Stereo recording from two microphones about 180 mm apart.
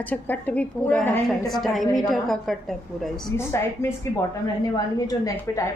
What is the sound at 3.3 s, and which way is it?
A woman's voice, 15° left (ahead or behind).